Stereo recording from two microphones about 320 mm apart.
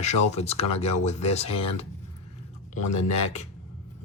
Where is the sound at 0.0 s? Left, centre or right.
Left.